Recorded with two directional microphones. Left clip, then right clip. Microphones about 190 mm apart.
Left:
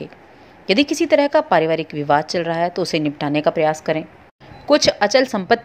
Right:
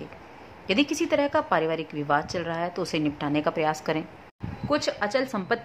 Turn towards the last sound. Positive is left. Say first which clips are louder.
# left 10 dB
turn(degrees=25)  # may be behind; listen again after turning